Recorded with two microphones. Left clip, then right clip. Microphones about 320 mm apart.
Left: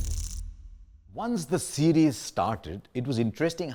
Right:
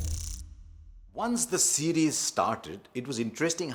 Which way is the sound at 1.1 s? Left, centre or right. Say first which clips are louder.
Even; left.